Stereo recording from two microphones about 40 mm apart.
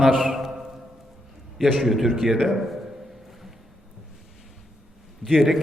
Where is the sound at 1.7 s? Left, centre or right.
Centre.